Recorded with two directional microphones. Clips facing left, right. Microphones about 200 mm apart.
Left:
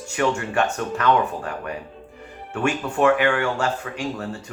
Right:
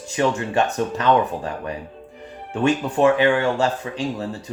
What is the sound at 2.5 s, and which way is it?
Speech, 20° right (ahead or behind).